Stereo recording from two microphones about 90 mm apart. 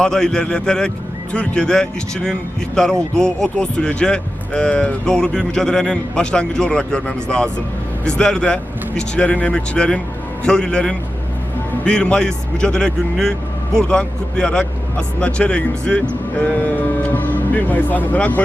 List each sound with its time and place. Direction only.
0.0 s speech: 5° left (ahead or behind)